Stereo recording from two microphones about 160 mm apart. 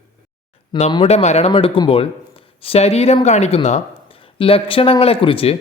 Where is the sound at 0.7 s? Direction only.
35° left (ahead or behind).